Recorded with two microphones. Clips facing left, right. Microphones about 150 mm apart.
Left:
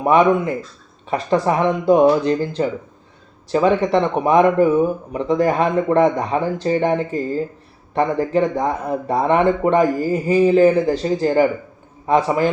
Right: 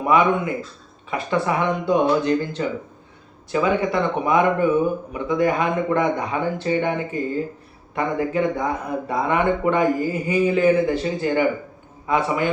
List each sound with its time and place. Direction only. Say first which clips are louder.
0.0 s speech: left 4 dB; 35° left (ahead or behind)